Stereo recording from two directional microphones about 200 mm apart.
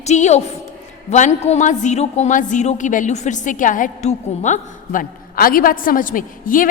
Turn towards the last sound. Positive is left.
turn(degrees=45)  # may be behind; listen again after turning